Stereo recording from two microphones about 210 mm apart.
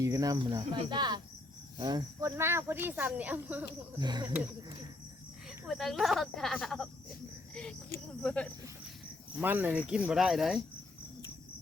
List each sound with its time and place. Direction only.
0.0 s speech: 15° right (ahead or behind)
3.9 s speech: 20° right (ahead or behind)
5.6 s speech: centre (ahead or behind)
8.2 s speech: 5° left (ahead or behind)
9.4 s speech: 10° right (ahead or behind)